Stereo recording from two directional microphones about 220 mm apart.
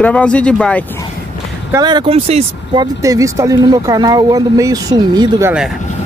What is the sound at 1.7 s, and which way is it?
Speech, 20° right (ahead or behind).